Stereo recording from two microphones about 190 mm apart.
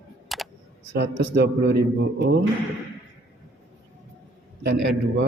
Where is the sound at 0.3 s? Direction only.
Centre (ahead or behind).